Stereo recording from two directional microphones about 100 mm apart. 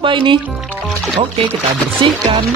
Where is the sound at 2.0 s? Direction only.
55° right (ahead or behind).